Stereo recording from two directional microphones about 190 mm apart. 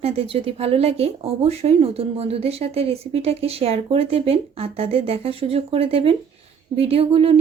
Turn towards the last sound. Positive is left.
turn(degrees=-30)  # may be behind; listen again after turning